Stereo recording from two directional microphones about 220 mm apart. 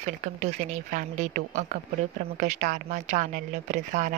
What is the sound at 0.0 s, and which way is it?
Speech, 35° right (ahead or behind).